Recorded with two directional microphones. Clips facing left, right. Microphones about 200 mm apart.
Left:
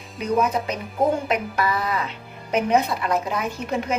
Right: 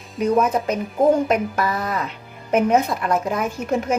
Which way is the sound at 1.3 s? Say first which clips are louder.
Right 3 dB; 45° right (ahead or behind).